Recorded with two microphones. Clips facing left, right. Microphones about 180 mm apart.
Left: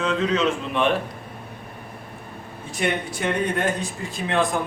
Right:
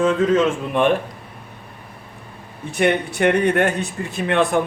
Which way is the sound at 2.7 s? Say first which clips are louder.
Right 7 dB; 65° right (ahead or behind).